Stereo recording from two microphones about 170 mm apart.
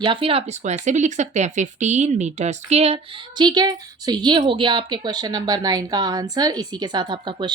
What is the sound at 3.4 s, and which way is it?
Speech, 25° right (ahead or behind).